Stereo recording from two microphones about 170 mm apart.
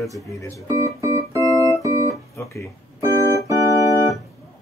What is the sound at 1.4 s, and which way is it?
Organ, 20° left (ahead or behind).